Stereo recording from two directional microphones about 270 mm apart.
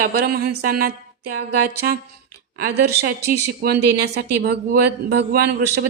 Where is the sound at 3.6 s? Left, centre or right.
Right.